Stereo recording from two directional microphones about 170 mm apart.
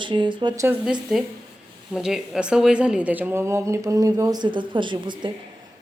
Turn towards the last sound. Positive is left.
turn(degrees=-25)  # may be behind; listen again after turning